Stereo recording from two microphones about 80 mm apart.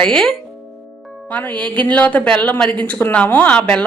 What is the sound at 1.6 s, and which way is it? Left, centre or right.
Speech, centre.